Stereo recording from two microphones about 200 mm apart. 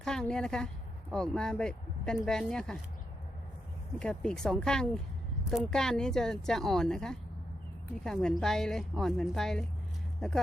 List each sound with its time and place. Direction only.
0.0 s speech: 5° left (ahead or behind)
4.0 s speech: 5° left (ahead or behind)